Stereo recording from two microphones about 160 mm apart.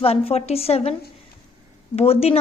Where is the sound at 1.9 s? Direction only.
40° left (ahead or behind).